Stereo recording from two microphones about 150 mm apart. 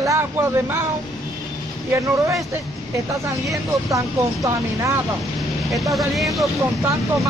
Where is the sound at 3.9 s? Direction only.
20° right (ahead or behind).